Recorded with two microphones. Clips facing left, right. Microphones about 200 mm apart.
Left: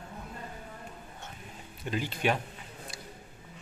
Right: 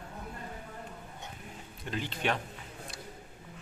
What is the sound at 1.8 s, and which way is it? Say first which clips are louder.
Speech: left 3 dB; 10° left (ahead or behind).